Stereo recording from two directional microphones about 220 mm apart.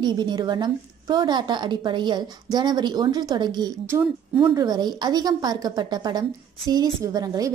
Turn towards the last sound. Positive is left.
turn(degrees=-15)  # may be behind; listen again after turning